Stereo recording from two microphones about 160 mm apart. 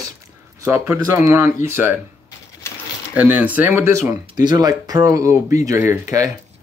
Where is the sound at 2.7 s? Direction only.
15° left (ahead or behind).